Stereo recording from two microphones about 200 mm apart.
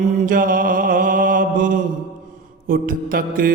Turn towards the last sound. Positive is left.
turn(degrees=-45)  # may be behind; listen again after turning